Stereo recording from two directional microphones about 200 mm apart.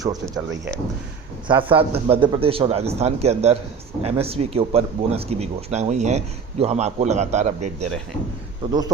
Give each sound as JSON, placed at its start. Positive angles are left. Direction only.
{"t": 1.5, "sound": "a man's voice", "side_deg": -25}
{"t": 8.6, "sound": "a man's voice", "side_deg": -25}